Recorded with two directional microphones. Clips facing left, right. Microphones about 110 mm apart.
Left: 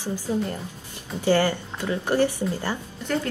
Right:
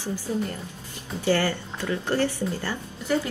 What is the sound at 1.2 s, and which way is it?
Speech, 15° left (ahead or behind).